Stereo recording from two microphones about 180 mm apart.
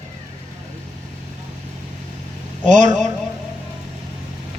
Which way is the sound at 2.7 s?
45° right (ahead or behind).